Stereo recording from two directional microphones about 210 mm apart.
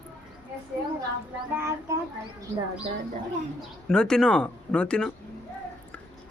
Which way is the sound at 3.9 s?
5° left (ahead or behind).